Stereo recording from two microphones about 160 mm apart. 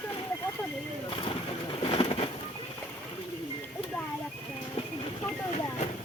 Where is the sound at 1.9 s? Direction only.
35° left (ahead or behind).